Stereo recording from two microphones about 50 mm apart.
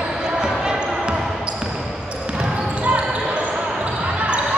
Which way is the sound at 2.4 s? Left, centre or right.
Right.